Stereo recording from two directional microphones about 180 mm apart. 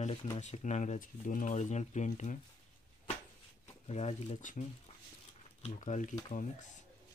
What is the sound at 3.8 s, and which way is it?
Speech, 35° left (ahead or behind).